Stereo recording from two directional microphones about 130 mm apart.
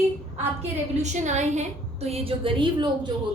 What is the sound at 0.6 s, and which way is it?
A woman's voice, 65° right (ahead or behind).